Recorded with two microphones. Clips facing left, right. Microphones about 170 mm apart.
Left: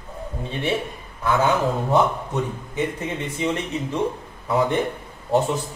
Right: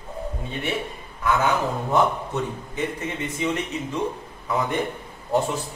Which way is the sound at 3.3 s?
30° left (ahead or behind).